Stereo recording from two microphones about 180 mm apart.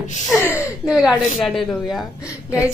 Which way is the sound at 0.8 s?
5° right (ahead or behind).